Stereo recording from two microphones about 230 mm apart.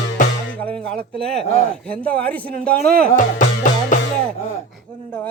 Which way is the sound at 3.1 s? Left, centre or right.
Left.